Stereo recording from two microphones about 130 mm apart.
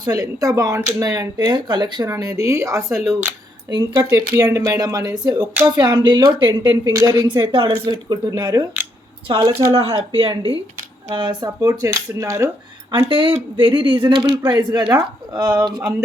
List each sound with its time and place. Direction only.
0.0 s speech: 25° right (ahead or behind)
3.7 s speech: 30° right (ahead or behind)
9.2 s speech: 45° right (ahead or behind)
9.5 s speech: 25° right (ahead or behind)
10.1 s speech: 45° right (ahead or behind); by 12.5 s 25° right (ahead or behind)
13.1 s speech: 40° right (ahead or behind)